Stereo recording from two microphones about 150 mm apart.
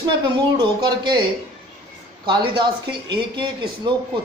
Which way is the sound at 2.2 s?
30° right (ahead or behind).